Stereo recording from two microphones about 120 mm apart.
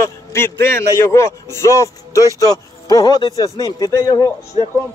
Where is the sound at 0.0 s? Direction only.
20° left (ahead or behind).